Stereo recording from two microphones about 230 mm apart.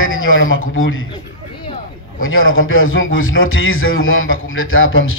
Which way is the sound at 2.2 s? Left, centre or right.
Left.